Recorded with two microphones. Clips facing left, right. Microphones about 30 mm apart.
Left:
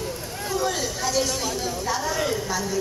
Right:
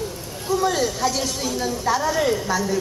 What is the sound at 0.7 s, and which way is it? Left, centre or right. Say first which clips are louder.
A woman's voice: right 4 dB; centre.